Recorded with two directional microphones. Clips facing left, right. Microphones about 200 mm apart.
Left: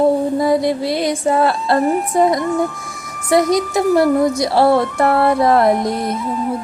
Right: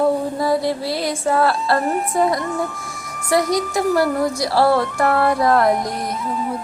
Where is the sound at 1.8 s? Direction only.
Centre (ahead or behind).